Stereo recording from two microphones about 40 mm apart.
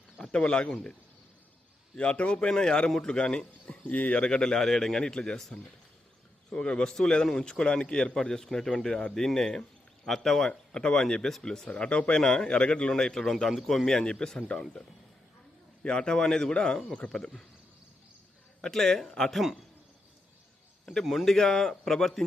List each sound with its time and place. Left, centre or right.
0.3 s speech: left
2.0 s speech: left
3.8 s speech: left
4.3 s speech: left
6.5 s speech: left; by 10.5 s centre
10.5 s speech: left
11.7 s speech: left
12.2 s a man's voice: centre
13.9 s speech: left
15.8 s speech: left
18.7 s speech: centre
19.3 s a man's voice: centre
21.0 s a man's voice: centre
21.3 s speech: centre